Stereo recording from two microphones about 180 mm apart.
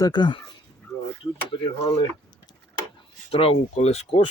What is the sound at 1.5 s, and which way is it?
Speech, 25° left (ahead or behind).